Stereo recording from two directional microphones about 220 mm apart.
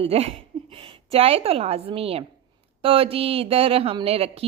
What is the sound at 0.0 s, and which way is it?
A woman's voice, 25° right (ahead or behind).